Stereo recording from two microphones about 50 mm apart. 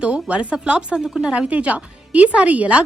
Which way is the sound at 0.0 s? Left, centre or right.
Right.